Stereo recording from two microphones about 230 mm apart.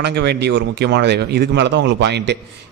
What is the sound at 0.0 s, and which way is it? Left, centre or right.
A man's voice, right.